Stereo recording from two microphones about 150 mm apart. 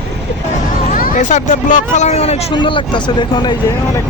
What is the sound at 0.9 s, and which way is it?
Speech, 65° left (ahead or behind).